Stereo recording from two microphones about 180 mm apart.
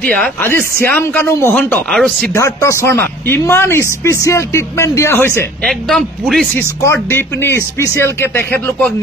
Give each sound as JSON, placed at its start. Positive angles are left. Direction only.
{"t": 0.0, "sound": "speech", "side_deg": 5}
{"t": 2.3, "sound": "speech", "side_deg": 15}
{"t": 5.7, "sound": "speech", "side_deg": 0}
{"t": 6.5, "sound": "speech", "side_deg": 15}